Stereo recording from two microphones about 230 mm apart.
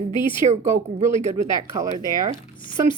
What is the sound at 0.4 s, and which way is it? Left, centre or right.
Speech, right.